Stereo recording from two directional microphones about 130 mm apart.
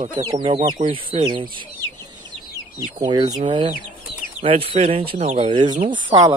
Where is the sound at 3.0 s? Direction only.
30° right (ahead or behind).